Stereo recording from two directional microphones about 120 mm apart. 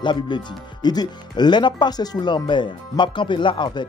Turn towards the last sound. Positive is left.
turn(degrees=40)  # may be behind; listen again after turning